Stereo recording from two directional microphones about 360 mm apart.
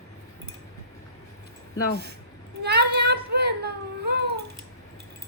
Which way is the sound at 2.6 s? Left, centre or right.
Right.